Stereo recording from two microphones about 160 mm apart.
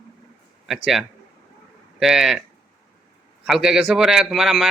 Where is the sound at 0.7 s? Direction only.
Centre (ahead or behind).